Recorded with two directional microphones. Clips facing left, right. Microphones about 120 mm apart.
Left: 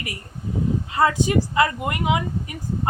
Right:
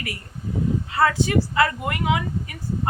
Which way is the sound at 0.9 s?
15° left (ahead or behind).